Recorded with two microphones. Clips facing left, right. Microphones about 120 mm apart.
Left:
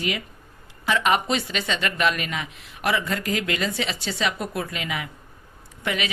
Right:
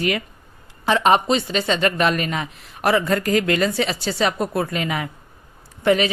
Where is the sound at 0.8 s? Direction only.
35° right (ahead or behind).